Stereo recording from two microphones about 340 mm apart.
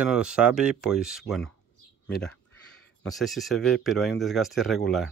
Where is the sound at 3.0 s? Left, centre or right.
Centre.